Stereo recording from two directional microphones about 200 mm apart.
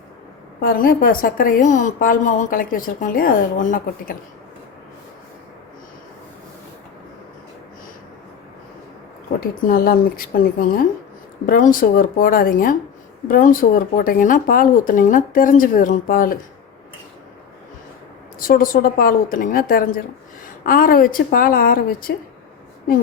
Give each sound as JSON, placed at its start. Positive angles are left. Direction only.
{"t": 0.6, "sound": "a woman's voice", "side_deg": 45}
{"t": 9.4, "sound": "a woman's voice", "side_deg": 45}
{"t": 18.3, "sound": "a woman's voice", "side_deg": 45}